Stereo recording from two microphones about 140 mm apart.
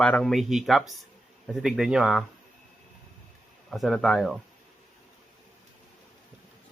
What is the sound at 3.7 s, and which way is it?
Speech, centre (ahead or behind).